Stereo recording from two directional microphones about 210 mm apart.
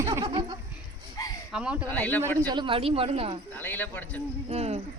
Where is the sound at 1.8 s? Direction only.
5° left (ahead or behind).